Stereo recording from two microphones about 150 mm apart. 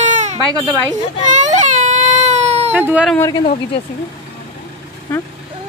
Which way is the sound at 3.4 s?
50° left (ahead or behind).